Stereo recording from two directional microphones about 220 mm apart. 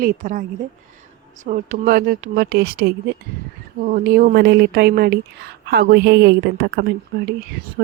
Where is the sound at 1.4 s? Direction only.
35° right (ahead or behind).